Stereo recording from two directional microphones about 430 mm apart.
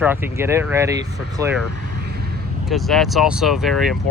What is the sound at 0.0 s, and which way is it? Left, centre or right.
Speech, centre.